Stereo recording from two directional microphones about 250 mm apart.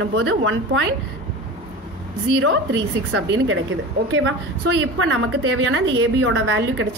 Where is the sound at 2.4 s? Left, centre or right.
Right.